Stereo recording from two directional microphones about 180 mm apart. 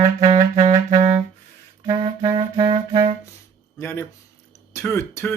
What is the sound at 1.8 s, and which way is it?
Clarinet, 25° right (ahead or behind).